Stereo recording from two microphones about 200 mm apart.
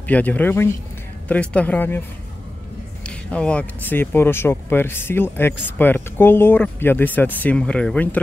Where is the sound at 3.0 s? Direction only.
5° left (ahead or behind).